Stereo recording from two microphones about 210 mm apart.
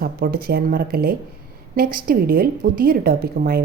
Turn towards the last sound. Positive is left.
turn(degrees=-45)  # may be behind; listen again after turning